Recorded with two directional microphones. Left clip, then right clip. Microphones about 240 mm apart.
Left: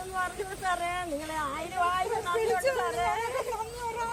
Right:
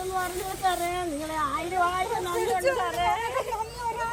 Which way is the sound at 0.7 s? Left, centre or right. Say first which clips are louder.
Left 2 dB; centre.